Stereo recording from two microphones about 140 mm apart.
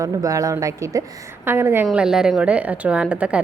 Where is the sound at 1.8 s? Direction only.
5° right (ahead or behind).